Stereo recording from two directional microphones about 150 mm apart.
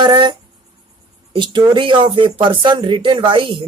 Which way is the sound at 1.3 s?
30° right (ahead or behind).